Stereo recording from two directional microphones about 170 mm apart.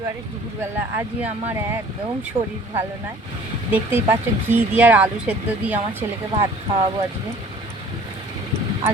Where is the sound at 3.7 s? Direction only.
15° right (ahead or behind).